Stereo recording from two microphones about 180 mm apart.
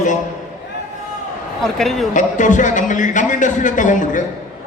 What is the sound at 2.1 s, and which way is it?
A man's voice, 45° left (ahead or behind).